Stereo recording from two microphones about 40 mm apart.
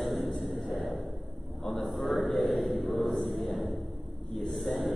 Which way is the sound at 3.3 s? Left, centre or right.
Centre.